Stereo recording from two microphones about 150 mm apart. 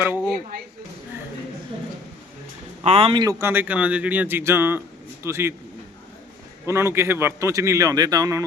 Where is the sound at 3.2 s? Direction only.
20° right (ahead or behind).